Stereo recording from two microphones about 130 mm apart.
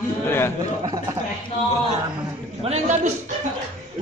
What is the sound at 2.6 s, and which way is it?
Speech, 60° right (ahead or behind).